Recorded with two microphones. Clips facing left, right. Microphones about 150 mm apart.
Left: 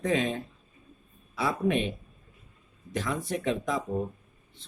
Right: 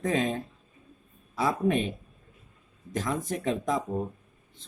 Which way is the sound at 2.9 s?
45° right (ahead or behind).